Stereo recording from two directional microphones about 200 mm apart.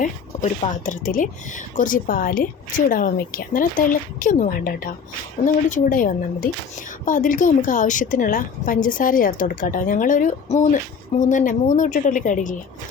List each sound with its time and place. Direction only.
0.0 s speech: 40° left (ahead or behind)